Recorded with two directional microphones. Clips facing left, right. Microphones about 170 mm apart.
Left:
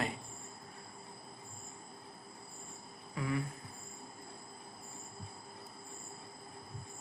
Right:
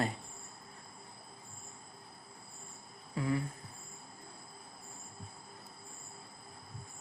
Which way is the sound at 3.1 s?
30° right (ahead or behind).